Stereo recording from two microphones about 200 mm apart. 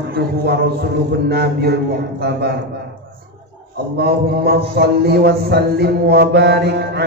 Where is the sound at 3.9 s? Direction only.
55° right (ahead or behind).